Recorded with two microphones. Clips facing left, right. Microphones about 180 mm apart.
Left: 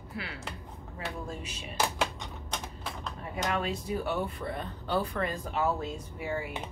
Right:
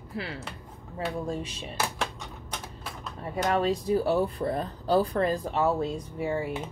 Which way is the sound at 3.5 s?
35° right (ahead or behind).